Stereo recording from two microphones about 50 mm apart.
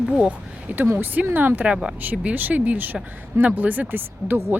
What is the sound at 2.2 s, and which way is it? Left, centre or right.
Speech, right.